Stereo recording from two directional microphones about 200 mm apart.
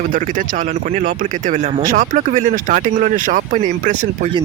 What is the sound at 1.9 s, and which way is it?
Speech, 40° right (ahead or behind).